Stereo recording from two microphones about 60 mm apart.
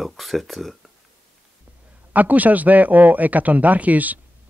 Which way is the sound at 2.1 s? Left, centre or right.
Right.